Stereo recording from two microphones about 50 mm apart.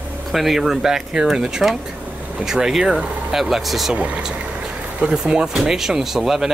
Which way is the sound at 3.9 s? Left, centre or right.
Right.